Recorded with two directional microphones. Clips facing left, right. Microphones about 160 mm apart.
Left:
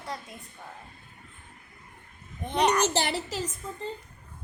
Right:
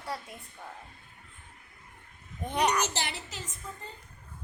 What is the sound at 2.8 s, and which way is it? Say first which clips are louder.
Speech: left 7 dB; 35° left (ahead or behind).